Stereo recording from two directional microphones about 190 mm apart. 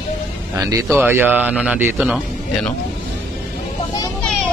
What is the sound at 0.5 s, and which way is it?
A man's voice, 15° right (ahead or behind).